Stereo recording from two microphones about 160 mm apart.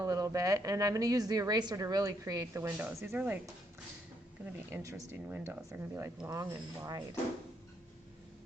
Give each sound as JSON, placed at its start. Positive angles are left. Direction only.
{"t": 0.0, "sound": "a woman's voice", "side_deg": -20}
{"t": 4.7, "sound": "a woman's voice", "side_deg": -15}